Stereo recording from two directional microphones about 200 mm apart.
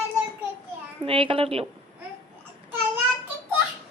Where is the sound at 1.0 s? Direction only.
25° right (ahead or behind).